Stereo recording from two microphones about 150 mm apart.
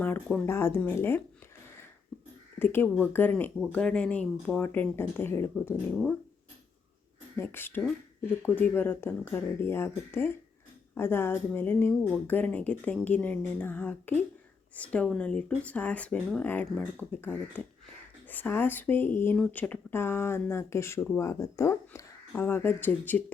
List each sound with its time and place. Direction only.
0.4 s speech: 15° left (ahead or behind)
2.6 s speech: 15° left (ahead or behind)
7.3 s speech: 15° left (ahead or behind)